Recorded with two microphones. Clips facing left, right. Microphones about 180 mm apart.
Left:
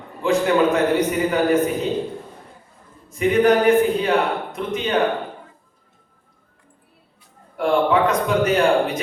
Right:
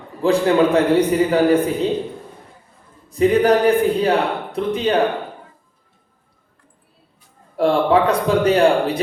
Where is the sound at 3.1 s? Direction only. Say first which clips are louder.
Right 2 dB; 35° right (ahead or behind).